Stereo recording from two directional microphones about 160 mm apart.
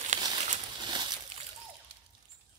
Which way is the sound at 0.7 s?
30° right (ahead or behind).